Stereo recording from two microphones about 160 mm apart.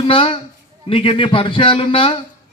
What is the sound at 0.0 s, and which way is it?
A man's voice, 35° left (ahead or behind).